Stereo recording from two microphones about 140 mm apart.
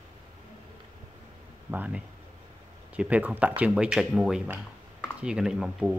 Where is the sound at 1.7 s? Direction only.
10° right (ahead or behind).